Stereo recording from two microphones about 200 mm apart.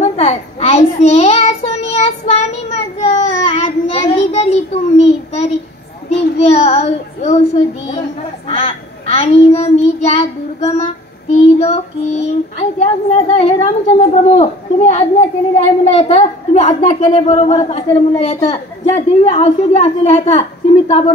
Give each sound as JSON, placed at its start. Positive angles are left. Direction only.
{"t": 0.0, "sound": "child singing", "side_deg": 35}
{"t": 8.5, "sound": "child singing", "side_deg": 30}
{"t": 11.3, "sound": "speech", "side_deg": 30}